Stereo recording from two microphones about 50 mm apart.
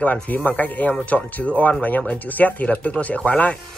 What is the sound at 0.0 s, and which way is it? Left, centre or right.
Speech, left.